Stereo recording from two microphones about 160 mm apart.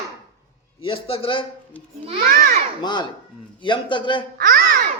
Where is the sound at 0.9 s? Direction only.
35° left (ahead or behind).